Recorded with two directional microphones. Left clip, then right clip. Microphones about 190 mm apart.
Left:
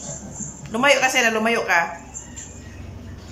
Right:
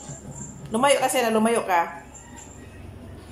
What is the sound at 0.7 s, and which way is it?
Speech, 15° right (ahead or behind).